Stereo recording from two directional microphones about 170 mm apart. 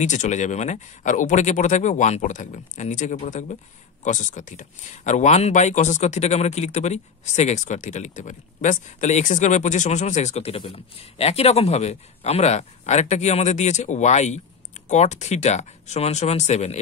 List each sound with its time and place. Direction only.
0.0 s speech: 45° left (ahead or behind)